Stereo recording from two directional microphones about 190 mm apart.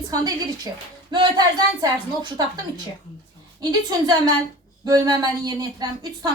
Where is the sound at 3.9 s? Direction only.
20° right (ahead or behind).